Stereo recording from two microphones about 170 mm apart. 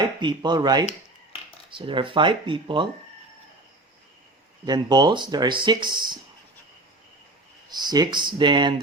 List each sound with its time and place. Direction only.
0.2 s speech: 25° right (ahead or behind)
4.6 s speech: 25° right (ahead or behind)
7.7 s speech: 25° right (ahead or behind)